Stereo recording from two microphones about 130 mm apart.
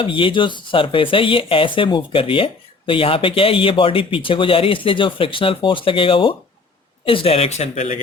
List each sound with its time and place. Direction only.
0.0 s speech: 40° left (ahead or behind); by 7.9 s 55° left (ahead or behind)